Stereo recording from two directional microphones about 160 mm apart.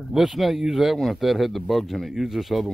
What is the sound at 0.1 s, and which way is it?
Speech, centre (ahead or behind).